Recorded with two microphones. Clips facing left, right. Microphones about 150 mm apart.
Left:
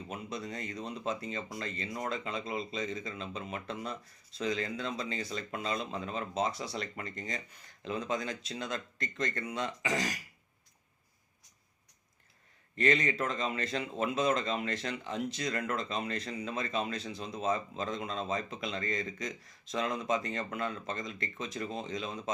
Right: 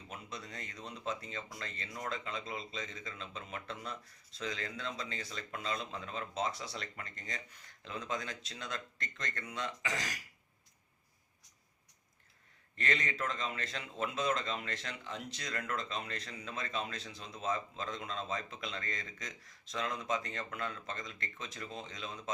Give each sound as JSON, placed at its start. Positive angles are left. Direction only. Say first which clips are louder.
{"t": 0.1, "sound": "speech", "louder": "left 6 dB", "side_deg": 15}
{"t": 12.7, "sound": "speech", "louder": "left 8 dB", "side_deg": 15}